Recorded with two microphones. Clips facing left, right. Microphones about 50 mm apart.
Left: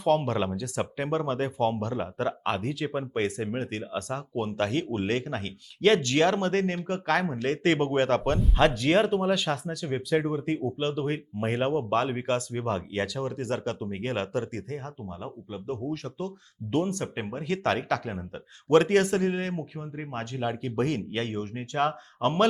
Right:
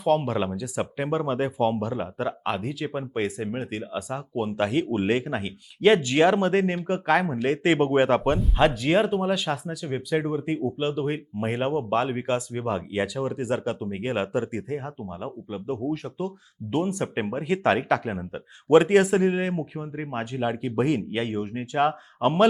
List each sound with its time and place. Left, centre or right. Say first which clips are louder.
0.0 s speech: right 2 dB; centre